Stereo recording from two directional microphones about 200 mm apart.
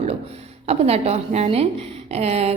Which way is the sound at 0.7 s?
30° right (ahead or behind).